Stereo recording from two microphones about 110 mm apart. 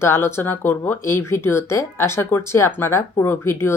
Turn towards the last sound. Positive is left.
turn(degrees=25)  # may be behind; listen again after turning